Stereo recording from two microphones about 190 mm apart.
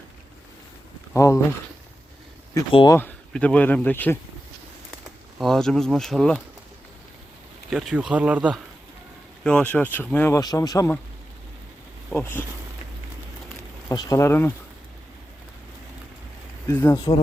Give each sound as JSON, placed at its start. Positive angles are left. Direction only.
{"t": 1.1, "sound": "speech", "side_deg": 15}
{"t": 2.7, "sound": "speech", "side_deg": 20}
{"t": 3.0, "sound": "speech", "side_deg": 5}
{"t": 5.4, "sound": "speech", "side_deg": 0}
{"t": 7.7, "sound": "speech", "side_deg": -5}
{"t": 9.4, "sound": "speech", "side_deg": 5}
{"t": 12.1, "sound": "speech", "side_deg": 10}
{"t": 13.8, "sound": "speech", "side_deg": 20}
{"t": 16.6, "sound": "speech", "side_deg": 15}